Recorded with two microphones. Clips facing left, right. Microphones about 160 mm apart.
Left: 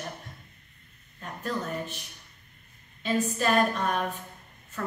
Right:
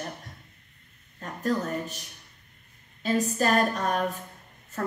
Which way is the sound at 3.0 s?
40° right (ahead or behind).